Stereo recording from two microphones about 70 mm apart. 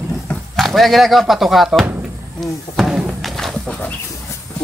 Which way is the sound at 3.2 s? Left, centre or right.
Centre.